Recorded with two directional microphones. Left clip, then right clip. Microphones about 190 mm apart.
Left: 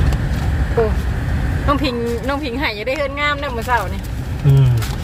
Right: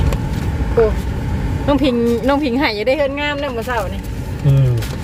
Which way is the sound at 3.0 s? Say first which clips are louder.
Right 1 dB; 15° right (ahead or behind).